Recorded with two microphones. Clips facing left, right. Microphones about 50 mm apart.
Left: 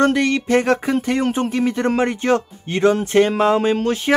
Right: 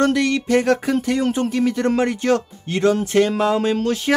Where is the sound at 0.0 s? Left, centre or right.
Left.